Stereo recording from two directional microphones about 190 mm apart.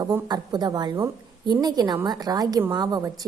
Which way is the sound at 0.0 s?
20° right (ahead or behind).